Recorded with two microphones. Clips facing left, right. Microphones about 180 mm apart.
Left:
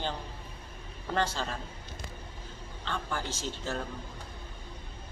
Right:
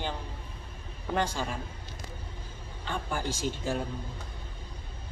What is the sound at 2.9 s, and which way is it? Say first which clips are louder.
Speech: right 2 dB; 10° right (ahead or behind).